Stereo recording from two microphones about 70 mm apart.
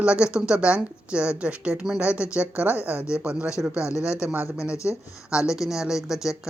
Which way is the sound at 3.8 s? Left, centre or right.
Left.